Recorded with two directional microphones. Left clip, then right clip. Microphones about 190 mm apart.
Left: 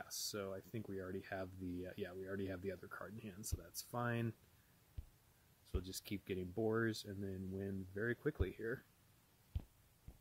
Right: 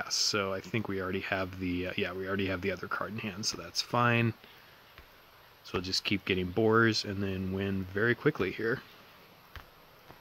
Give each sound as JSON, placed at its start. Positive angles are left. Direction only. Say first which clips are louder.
{"t": 0.0, "sound": "speech", "louder": "right 16 dB", "side_deg": 40}
{"t": 5.7, "sound": "speech", "louder": "right 17 dB", "side_deg": 40}